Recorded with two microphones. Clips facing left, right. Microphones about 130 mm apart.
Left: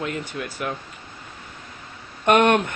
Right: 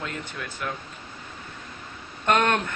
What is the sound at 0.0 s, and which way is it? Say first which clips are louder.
Speech: left 6 dB; 10° left (ahead or behind).